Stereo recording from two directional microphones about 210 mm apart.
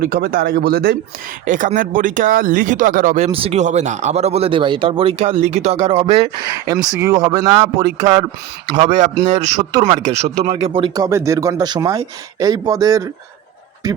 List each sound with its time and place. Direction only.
0.0 s speech: 45° right (ahead or behind)
3.2 s speech: 25° right (ahead or behind)
8.8 s speech: 35° right (ahead or behind); by 14.0 s 15° right (ahead or behind)